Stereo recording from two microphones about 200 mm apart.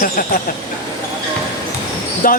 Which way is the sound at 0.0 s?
45° left (ahead or behind).